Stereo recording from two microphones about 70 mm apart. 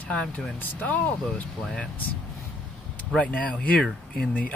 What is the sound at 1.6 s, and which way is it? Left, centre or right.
Speech, centre.